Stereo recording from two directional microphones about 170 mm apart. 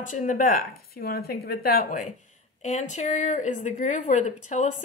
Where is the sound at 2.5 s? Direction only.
45° left (ahead or behind).